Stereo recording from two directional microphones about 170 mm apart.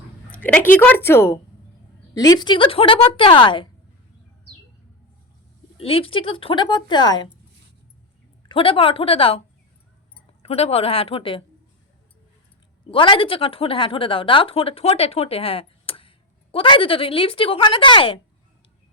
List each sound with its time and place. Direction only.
0.3 s a sound: 10° left (ahead or behind)
0.8 s a woman's voice: 10° left (ahead or behind); by 3.7 s 30° left (ahead or behind)
5.7 s a woman's voice: 35° left (ahead or behind)
8.4 s a woman's voice: 30° left (ahead or behind)
10.4 s a woman's voice: 35° left (ahead or behind)
12.9 s a woman's voice: 30° left (ahead or behind)